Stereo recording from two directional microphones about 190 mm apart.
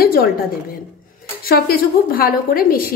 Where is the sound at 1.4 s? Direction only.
50° left (ahead or behind).